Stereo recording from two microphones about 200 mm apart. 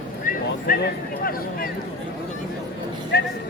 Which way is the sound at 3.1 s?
55° left (ahead or behind).